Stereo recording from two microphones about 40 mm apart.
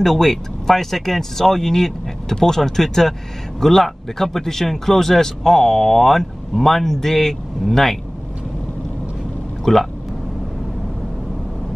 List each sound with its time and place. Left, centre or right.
0.0 s speech: centre
9.7 s speech: centre